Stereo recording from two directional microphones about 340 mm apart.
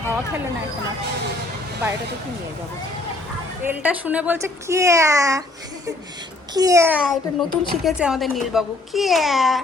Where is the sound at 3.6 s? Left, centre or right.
Centre.